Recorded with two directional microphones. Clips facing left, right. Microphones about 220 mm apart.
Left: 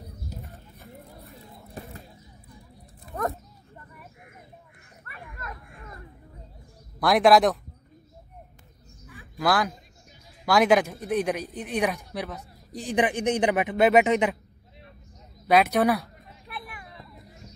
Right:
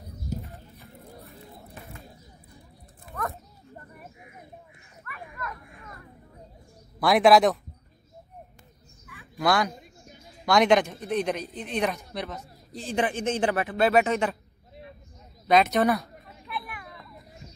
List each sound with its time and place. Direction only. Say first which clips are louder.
5.1 s a sound: right 3 dB; 30° left (ahead or behind)
7.0 s speech: even; centre (ahead or behind)
9.4 s speech: even; centre (ahead or behind); by 14.3 s 20° left (ahead or behind)
15.4 s speech: left 1 dB; 10° left (ahead or behind)